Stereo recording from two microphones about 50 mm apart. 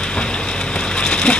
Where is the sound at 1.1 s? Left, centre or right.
Centre.